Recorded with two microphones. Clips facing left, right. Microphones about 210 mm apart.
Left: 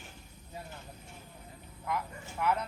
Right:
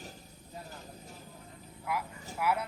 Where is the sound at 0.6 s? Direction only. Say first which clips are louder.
Right 1 dB; 35° right (ahead or behind).